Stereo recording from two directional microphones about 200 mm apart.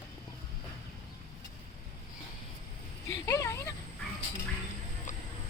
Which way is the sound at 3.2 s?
15° left (ahead or behind).